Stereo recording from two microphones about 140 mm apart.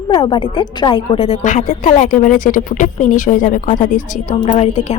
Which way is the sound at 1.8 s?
70° left (ahead or behind).